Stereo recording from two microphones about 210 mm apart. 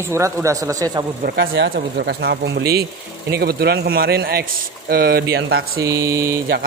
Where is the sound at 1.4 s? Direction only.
50° right (ahead or behind).